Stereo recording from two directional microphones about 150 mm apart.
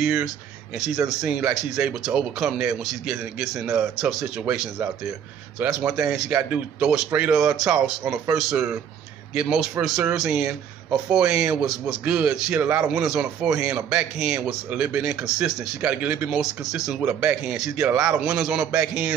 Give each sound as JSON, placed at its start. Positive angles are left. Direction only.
{"t": 0.0, "sound": "a man's voice", "side_deg": -5}